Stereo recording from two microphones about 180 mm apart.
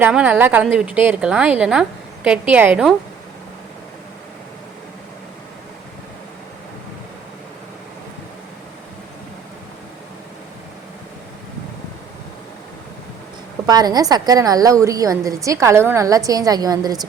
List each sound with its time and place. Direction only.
0.0 s a woman's voice: 10° right (ahead or behind)
13.7 s a woman's voice: 20° right (ahead or behind)